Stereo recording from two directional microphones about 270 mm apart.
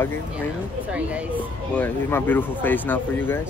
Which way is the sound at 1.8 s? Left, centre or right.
Centre.